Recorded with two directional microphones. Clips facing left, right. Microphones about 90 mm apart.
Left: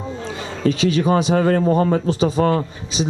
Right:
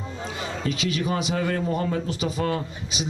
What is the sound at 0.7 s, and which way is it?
A man's voice, 30° left (ahead or behind).